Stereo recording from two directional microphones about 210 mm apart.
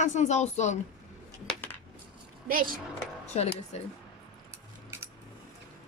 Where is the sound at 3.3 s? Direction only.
30° left (ahead or behind).